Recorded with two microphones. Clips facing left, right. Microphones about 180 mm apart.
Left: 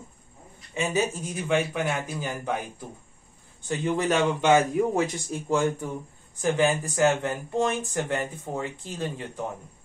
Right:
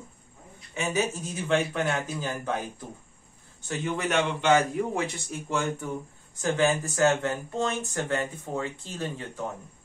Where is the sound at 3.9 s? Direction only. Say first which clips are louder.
Left 3 dB; 35° left (ahead or behind).